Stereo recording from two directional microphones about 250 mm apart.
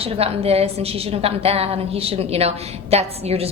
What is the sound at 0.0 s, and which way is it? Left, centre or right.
A woman's voice, right.